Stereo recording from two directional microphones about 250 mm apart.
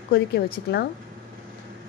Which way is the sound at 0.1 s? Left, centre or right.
Left.